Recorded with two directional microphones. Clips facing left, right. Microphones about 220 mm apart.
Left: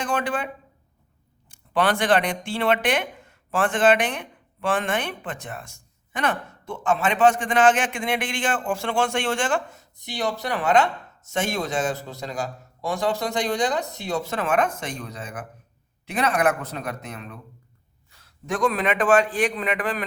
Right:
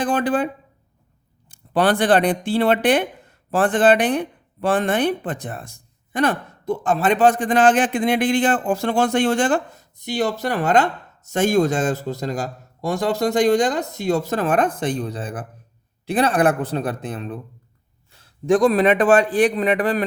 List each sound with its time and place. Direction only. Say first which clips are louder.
0.0 s speech: right 6 dB; 35° right (ahead or behind)
12.8 s speech: right 5 dB; 45° right (ahead or behind)